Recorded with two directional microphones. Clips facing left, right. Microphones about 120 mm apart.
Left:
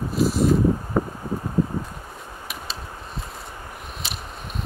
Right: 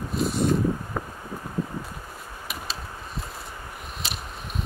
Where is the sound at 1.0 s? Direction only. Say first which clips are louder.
Left 9 dB; 30° left (ahead or behind).